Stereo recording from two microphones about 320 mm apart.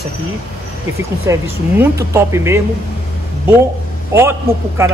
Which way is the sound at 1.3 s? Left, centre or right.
Centre.